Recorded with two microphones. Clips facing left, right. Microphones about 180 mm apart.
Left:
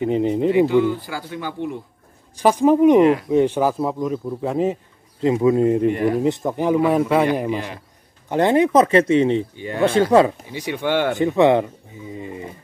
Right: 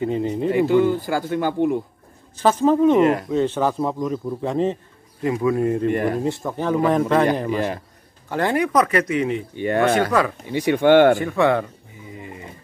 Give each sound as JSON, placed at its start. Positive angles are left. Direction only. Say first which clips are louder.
{"t": 0.0, "sound": "speech", "louder": "left 3 dB", "side_deg": 20}
{"t": 0.7, "sound": "speech", "louder": "right 1 dB", "side_deg": -45}
{"t": 2.3, "sound": "a man's voice", "louder": "left 2 dB", "side_deg": 15}
{"t": 5.2, "sound": "speech", "louder": "left 4 dB", "side_deg": 25}
{"t": 5.9, "sound": "speech", "louder": "left 2 dB", "side_deg": -50}
{"t": 6.1, "sound": "a man's voice", "louder": "left 4 dB", "side_deg": 20}
{"t": 8.3, "sound": "speech", "louder": "left 5 dB", "side_deg": 20}
{"t": 9.6, "sound": "speech", "louder": "right 2 dB", "side_deg": -65}
{"t": 10.1, "sound": "speech", "louder": "left 6 dB", "side_deg": 25}
{"t": 10.5, "sound": "speech", "louder": "right 7 dB", "side_deg": -55}
{"t": 11.1, "sound": "speech", "louder": "left 4 dB", "side_deg": 20}